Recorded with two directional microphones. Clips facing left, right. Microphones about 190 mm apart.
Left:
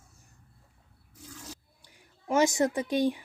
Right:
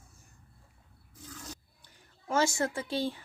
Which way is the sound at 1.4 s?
10° left (ahead or behind).